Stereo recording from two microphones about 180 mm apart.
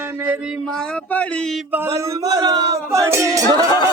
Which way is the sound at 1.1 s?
5° left (ahead or behind).